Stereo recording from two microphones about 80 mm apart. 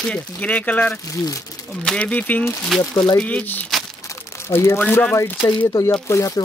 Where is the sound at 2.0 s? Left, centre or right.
Centre.